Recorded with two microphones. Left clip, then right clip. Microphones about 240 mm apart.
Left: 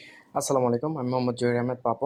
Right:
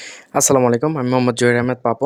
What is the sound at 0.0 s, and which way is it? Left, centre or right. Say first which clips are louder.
Speech: right 12 dB; right.